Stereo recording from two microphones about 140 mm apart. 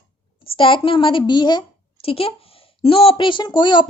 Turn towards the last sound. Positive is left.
turn(degrees=35)  # may be behind; listen again after turning